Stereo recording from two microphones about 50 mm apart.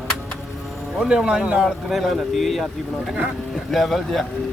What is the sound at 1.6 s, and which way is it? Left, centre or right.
Speech, centre.